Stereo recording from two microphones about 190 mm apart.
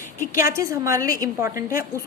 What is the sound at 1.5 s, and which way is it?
Speech, 50° left (ahead or behind).